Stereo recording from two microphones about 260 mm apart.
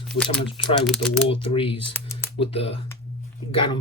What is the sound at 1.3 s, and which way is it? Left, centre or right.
Speech, left.